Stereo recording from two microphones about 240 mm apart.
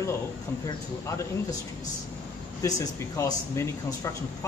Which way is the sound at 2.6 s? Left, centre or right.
Centre.